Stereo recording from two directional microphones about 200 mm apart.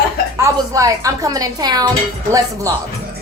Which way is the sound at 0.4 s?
15° right (ahead or behind).